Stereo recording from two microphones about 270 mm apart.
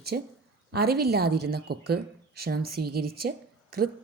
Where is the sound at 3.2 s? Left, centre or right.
Right.